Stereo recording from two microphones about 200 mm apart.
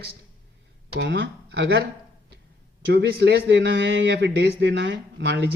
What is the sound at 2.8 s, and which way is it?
A man's voice, 55° right (ahead or behind).